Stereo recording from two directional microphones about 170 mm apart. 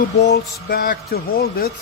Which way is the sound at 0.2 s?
80° left.